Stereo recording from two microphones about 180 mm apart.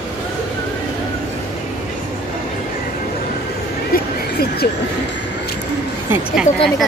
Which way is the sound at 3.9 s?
60° left (ahead or behind).